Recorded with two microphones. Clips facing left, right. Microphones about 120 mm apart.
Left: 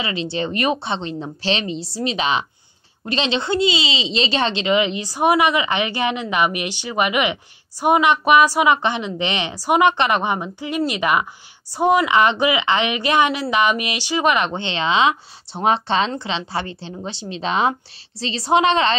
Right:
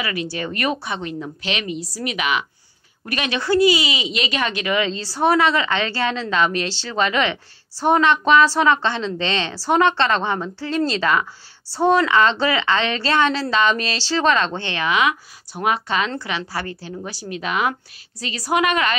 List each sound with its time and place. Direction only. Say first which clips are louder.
0.0 s a woman's voice: left 2 dB; 25° left (ahead or behind)